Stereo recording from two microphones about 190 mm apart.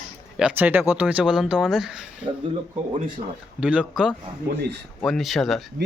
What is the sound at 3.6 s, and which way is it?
Speech, 5° right (ahead or behind).